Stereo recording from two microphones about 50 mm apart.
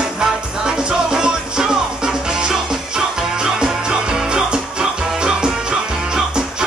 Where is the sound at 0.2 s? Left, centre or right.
Centre.